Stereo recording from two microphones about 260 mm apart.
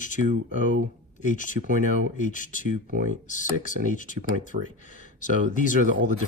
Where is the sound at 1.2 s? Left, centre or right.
Left.